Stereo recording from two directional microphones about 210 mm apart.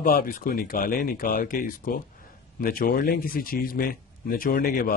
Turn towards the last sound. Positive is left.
turn(degrees=45)  # may be behind; listen again after turning